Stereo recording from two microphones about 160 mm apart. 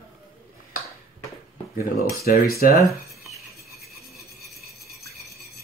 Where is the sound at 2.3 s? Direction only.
70° left (ahead or behind).